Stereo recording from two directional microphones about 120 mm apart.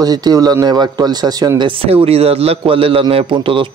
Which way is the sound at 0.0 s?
35° right (ahead or behind).